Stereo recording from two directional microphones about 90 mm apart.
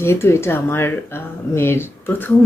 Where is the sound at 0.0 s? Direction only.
30° left (ahead or behind).